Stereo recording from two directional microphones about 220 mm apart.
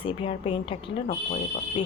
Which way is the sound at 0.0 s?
25° left (ahead or behind).